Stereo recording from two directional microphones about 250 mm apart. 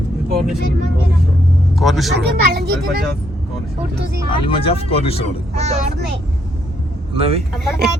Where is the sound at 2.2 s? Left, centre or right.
Right.